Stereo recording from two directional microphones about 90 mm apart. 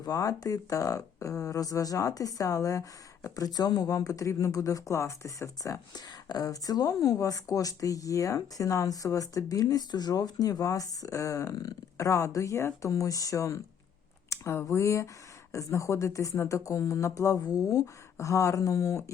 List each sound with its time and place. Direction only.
0.0 s a woman's voice: 40° left (ahead or behind)
5.9 s a woman's voice: 45° left (ahead or behind)